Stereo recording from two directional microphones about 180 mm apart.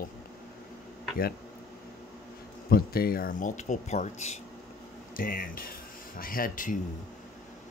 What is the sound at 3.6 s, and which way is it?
Speech, 40° left (ahead or behind).